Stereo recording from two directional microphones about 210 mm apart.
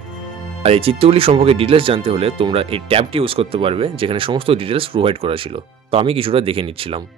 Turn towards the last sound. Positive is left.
turn(degrees=-25)  # may be behind; listen again after turning